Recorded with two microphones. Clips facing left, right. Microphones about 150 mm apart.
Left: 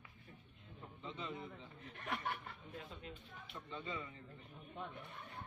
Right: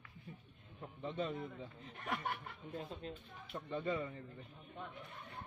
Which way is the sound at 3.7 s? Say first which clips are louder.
Right 8 dB; 50° right (ahead or behind).